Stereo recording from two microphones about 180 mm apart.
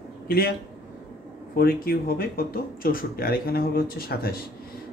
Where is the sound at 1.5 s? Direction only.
55° left (ahead or behind).